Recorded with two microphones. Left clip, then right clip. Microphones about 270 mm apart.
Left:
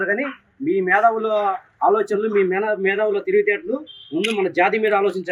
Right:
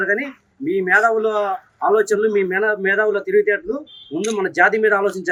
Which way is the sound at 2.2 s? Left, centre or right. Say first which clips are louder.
Right 2 dB; centre.